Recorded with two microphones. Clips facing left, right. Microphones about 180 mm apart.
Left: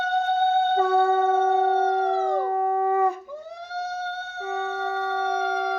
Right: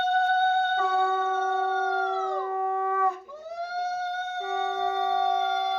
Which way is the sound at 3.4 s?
10° right (ahead or behind).